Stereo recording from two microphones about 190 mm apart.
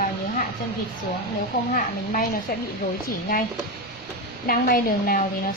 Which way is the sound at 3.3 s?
50° left (ahead or behind).